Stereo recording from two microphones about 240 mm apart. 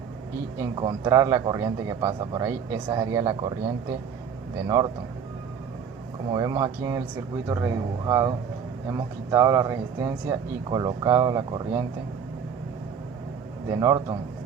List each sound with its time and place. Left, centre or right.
0.6 s speech: centre
4.6 s speech: centre
6.3 s speech: centre
13.7 s speech: centre